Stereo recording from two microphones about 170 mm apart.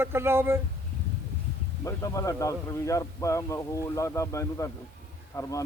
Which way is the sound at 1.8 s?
20° left (ahead or behind).